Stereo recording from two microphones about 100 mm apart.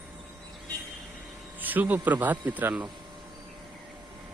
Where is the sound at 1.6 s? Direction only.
15° right (ahead or behind).